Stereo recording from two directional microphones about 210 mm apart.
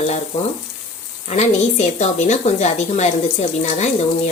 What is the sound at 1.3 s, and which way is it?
A woman's voice, 30° left (ahead or behind).